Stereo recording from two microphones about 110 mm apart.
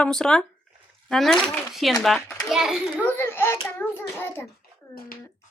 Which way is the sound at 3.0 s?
20° left (ahead or behind).